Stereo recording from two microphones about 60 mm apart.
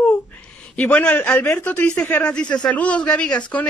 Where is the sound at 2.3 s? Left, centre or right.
Centre.